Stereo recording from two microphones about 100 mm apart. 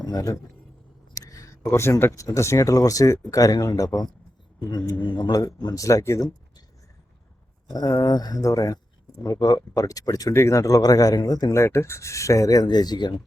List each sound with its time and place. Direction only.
0.0 s a man's voice: 40° left (ahead or behind)
5.0 s speech: 45° left (ahead or behind)
7.7 s speech: 40° left (ahead or behind)
11.5 s speech: 30° left (ahead or behind); by 13.1 s 45° left (ahead or behind)